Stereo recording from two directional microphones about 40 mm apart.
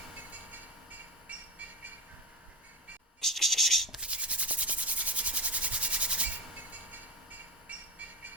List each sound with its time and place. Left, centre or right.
0.3 s train: right
3.2 s scratch: centre
4.0 s rub: right